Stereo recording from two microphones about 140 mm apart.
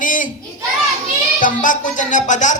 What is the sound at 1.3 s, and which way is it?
Speech, 70° left (ahead or behind).